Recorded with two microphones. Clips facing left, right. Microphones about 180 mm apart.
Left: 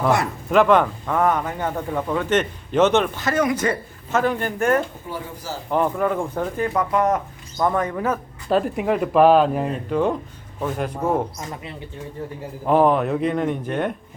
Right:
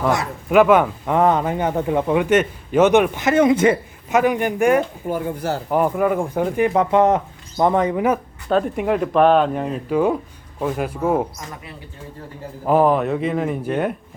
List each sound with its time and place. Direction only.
0.5 s a man's voice: 5° right (ahead or behind)
1.0 s a man's voice: 20° right (ahead or behind)
5.0 s speech: 55° right (ahead or behind)
5.7 s a man's voice: 10° right (ahead or behind)
6.7 s speech: 25° right (ahead or behind)
8.4 s a man's voice: 5° left (ahead or behind)
12.6 s speech: centre (ahead or behind)